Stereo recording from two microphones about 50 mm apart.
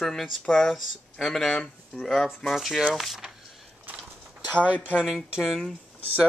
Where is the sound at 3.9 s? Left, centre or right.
Right.